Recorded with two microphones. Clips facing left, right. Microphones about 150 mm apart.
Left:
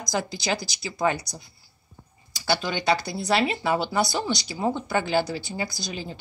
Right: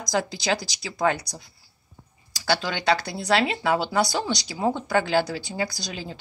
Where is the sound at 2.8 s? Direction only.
10° left (ahead or behind).